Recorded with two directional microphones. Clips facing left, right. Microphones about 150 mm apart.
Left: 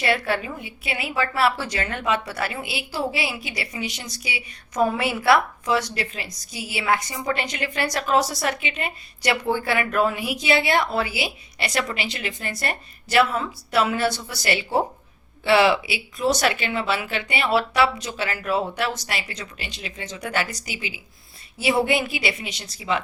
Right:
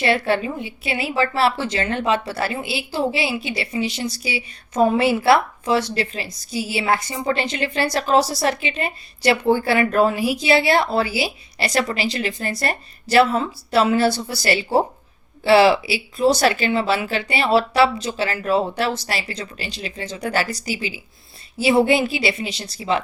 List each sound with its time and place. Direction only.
0.0 s a woman's voice: 30° right (ahead or behind)